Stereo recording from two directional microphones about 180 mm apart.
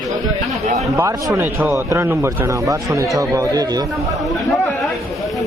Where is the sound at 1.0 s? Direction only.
15° right (ahead or behind).